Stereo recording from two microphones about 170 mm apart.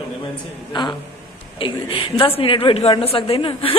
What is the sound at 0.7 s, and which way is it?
A woman's voice, 25° left (ahead or behind).